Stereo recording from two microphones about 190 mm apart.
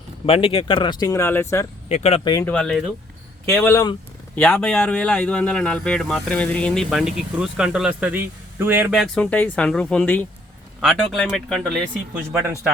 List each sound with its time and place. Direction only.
0.3 s speech: 30° left (ahead or behind); by 1.6 s 15° left (ahead or behind)
1.9 s speech: 30° left (ahead or behind)
2.3 s speech: 10° left (ahead or behind)
9.2 s speech: 10° left (ahead or behind)